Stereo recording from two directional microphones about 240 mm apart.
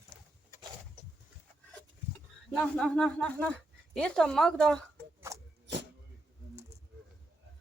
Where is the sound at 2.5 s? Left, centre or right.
Centre.